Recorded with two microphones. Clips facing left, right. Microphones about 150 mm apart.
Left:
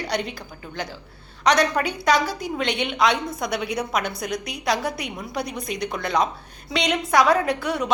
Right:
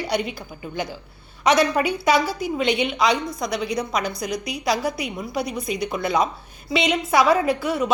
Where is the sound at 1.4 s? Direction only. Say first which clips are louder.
Right 2 dB; 5° right (ahead or behind).